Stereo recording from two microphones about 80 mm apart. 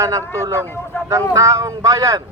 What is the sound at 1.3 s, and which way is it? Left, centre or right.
Speech, right.